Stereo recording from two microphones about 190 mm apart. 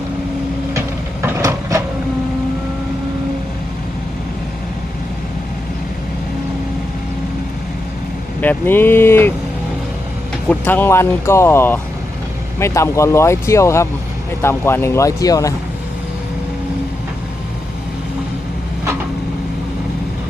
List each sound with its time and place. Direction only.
1.2 s vehicle: 15° right (ahead or behind)
8.4 s speech: 10° left (ahead or behind)
10.5 s speech: 10° left (ahead or behind)